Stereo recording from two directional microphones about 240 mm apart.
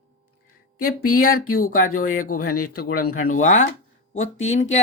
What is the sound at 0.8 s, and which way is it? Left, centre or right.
Speech, left.